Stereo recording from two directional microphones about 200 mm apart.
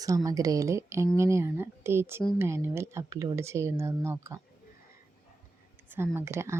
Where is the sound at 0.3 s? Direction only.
15° right (ahead or behind).